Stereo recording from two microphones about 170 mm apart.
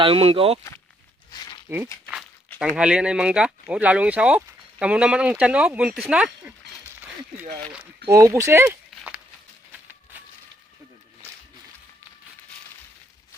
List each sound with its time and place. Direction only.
0.0 s speech: 35° right (ahead or behind)
1.3 s a sound: 25° left (ahead or behind)
2.7 s speech: 5° right (ahead or behind)
7.7 s speech: 5° right (ahead or behind)
8.1 s speech: 20° right (ahead or behind)